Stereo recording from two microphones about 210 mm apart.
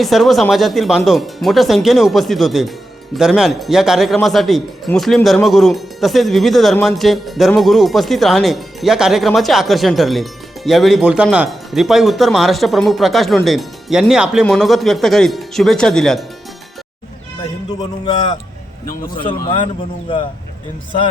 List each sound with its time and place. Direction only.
0.0 s speech: centre (ahead or behind)
17.7 s speech: 20° left (ahead or behind)